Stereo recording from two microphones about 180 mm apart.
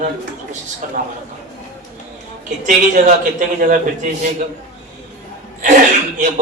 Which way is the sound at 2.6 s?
45° right (ahead or behind).